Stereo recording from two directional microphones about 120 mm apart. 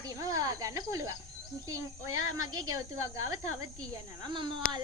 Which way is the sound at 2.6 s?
30° right (ahead or behind).